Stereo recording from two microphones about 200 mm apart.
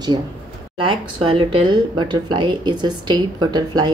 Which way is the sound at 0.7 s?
25° right (ahead or behind).